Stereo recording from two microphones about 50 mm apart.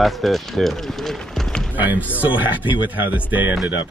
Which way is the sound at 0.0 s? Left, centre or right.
Centre.